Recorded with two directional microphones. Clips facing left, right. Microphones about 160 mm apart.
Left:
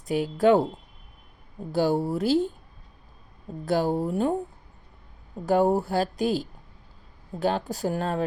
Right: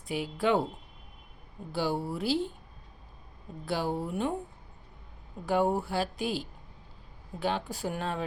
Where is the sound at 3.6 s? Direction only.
40° left (ahead or behind).